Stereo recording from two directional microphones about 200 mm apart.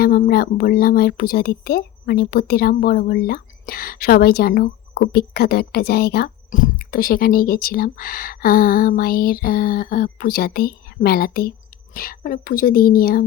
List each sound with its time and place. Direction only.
0.0 s speech: 45° left (ahead or behind)